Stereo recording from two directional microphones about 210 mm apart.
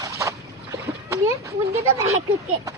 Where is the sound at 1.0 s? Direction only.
15° right (ahead or behind).